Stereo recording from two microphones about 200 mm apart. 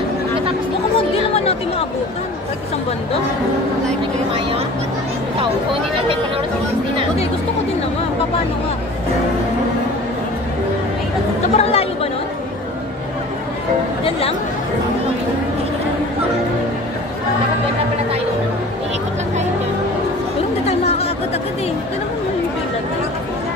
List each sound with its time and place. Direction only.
0.9 s a sound: 30° left (ahead or behind)
5.9 s chatter: 25° right (ahead or behind)
11.4 s chatter: 30° left (ahead or behind)
20.6 s chatter: 30° left (ahead or behind)